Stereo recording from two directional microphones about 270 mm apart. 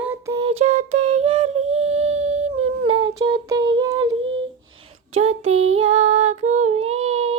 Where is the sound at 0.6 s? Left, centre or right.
Right.